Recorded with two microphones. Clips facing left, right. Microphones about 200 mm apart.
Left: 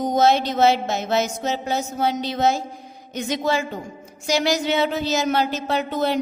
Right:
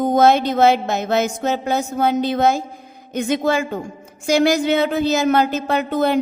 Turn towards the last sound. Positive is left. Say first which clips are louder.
# right 4 dB
turn(degrees=-55)  # may be behind; listen again after turning